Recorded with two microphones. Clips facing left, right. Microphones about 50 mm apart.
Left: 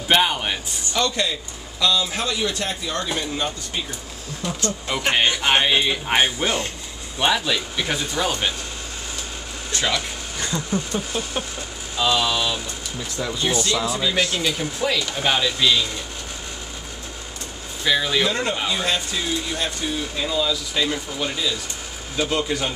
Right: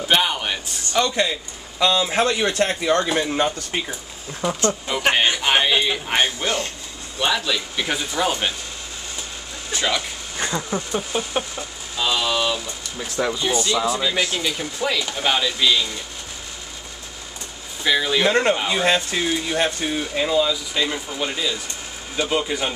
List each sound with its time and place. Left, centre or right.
0.1 s speech: centre
0.9 s speech: centre
1.8 s speech: right
4.4 s speech: centre
4.9 s speech: centre
7.7 s speech: centre
9.7 s speech: centre
10.3 s speech: right
12.0 s speech: centre
14.8 s speech: centre
17.8 s speech: centre
18.2 s speech: right; by 22.8 s centre